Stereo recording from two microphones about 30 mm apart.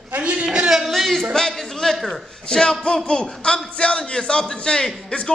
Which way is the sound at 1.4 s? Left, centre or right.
Centre.